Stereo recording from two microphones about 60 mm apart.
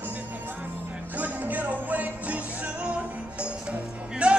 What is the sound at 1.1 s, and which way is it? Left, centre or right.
Music, right.